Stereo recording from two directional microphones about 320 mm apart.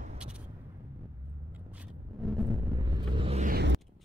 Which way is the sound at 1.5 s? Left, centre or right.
Centre.